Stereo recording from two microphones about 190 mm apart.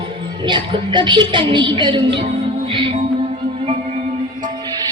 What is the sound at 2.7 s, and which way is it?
Music, 25° right (ahead or behind).